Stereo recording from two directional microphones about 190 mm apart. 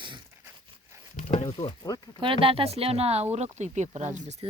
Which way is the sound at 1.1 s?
40° left (ahead or behind).